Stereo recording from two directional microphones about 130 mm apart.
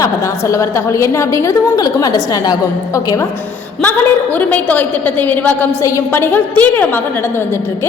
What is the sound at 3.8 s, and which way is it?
A woman's voice, 15° left (ahead or behind).